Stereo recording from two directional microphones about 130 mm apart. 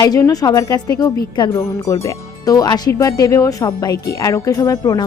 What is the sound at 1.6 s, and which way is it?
Speech, 25° left (ahead or behind).